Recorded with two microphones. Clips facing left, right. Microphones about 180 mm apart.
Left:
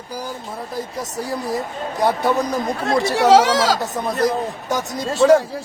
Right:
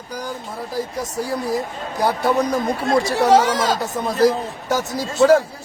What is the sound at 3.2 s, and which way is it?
Speech, 90° left.